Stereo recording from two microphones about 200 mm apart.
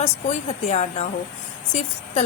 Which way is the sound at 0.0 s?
35° left (ahead or behind).